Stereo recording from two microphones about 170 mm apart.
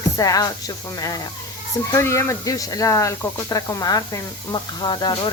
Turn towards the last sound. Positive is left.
turn(degrees=25)  # may be behind; listen again after turning